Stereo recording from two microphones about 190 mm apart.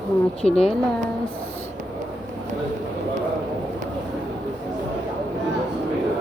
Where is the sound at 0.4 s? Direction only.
35° left (ahead or behind).